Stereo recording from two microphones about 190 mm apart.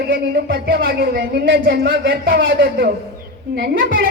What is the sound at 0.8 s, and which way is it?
A woman's voice, 65° right (ahead or behind).